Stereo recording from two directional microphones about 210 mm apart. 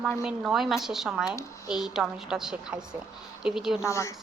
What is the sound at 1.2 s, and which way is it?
Speech, 15° left (ahead or behind).